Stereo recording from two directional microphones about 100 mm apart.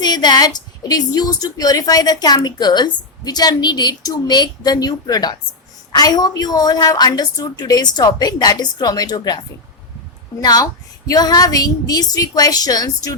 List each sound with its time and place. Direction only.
0.0 s a woman's voice: 45° left (ahead or behind)
10.4 s a woman's voice: 40° left (ahead or behind)